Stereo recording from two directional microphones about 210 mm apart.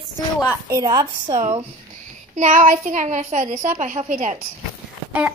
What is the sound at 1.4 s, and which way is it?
A woman's voice, 30° right (ahead or behind).